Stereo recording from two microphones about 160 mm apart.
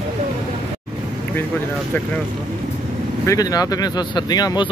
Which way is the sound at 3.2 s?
20° left (ahead or behind).